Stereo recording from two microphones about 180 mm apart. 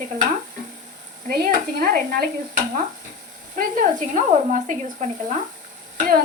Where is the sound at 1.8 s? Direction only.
55° right (ahead or behind).